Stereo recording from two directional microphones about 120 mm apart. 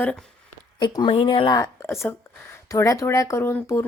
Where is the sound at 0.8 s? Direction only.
45° left (ahead or behind).